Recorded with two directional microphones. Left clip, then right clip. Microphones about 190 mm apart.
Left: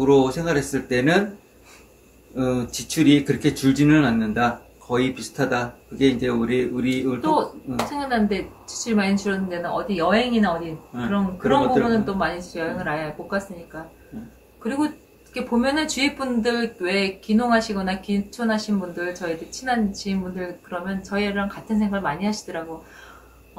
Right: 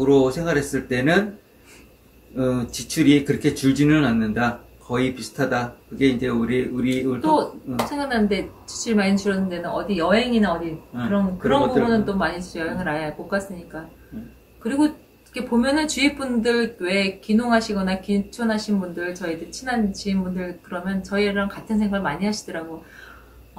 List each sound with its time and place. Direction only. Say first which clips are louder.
0.0 s speech: even; 15° left (ahead or behind)
2.3 s speech: right 1 dB; 15° left (ahead or behind)
7.3 s speech: right 1 dB; 10° right (ahead or behind)
10.9 s speech: left 1 dB; 10° left (ahead or behind)
12.2 s speech: even; 10° right (ahead or behind)
14.6 s speech: right 3 dB; 10° right (ahead or behind)